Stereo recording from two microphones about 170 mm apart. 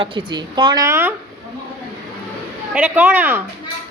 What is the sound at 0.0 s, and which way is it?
A woman's voice, 30° right (ahead or behind).